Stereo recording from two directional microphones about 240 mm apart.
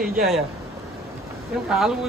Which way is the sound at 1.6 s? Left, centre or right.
Centre.